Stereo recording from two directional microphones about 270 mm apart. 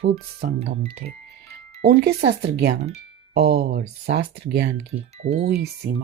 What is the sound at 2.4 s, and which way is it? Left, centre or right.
Speech, right.